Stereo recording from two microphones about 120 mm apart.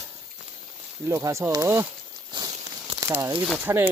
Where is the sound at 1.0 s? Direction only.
25° right (ahead or behind).